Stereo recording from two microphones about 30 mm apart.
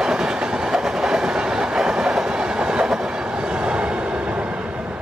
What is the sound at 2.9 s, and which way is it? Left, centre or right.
Train, right.